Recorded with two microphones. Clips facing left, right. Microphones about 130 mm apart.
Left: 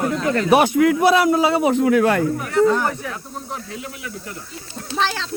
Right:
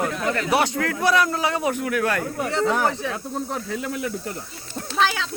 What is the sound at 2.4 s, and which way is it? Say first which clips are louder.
Speech: left 3 dB; 25° right (ahead or behind).